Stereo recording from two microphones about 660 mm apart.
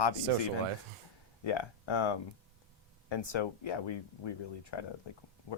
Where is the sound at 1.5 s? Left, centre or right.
Left.